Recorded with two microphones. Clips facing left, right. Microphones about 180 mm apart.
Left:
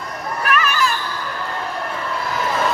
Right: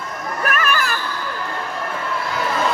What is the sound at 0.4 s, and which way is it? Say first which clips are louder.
Children playing: left 2 dB; 50° right (ahead or behind).